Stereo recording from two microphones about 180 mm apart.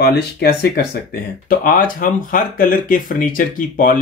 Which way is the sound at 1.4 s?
50° left (ahead or behind).